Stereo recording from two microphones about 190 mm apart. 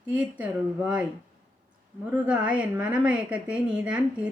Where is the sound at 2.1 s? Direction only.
5° right (ahead or behind).